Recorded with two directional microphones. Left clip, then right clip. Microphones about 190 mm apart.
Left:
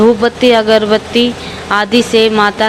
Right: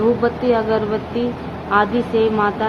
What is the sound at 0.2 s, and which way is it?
A woman's voice, 30° left (ahead or behind).